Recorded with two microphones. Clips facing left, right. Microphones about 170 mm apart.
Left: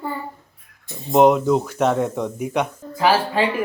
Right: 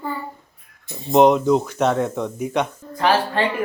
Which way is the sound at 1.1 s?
5° left (ahead or behind).